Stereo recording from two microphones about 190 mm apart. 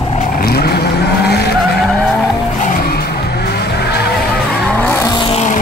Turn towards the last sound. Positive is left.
turn(degrees=10)  # may be behind; listen again after turning